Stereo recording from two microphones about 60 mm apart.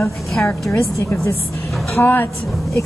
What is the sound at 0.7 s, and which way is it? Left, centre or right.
Speech, left.